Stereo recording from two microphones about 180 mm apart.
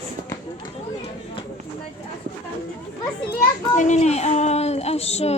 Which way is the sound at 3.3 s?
40° left (ahead or behind).